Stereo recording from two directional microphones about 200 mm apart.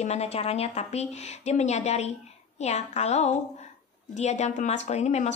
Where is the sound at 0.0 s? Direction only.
35° left (ahead or behind).